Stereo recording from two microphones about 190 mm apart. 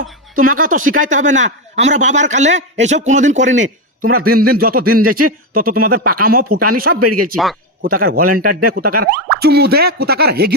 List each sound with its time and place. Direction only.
0.0 s speech: 45° right (ahead or behind)
4.2 s speech: 50° right (ahead or behind)